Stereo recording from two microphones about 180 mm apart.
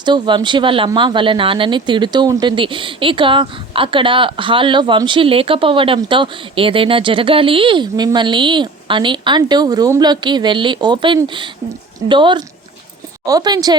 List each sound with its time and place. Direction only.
0.0 s speech: 25° right (ahead or behind)